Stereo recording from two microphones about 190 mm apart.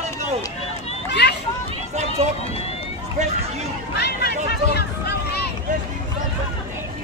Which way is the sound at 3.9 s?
60° left (ahead or behind).